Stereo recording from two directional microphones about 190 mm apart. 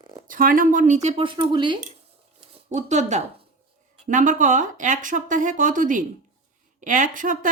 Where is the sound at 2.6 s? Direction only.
35° right (ahead or behind).